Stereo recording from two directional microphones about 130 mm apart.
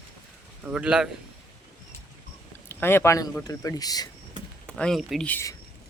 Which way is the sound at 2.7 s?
15° left (ahead or behind).